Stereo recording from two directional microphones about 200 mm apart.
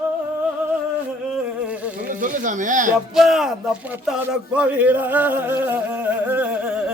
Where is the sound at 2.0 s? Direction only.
40° right (ahead or behind).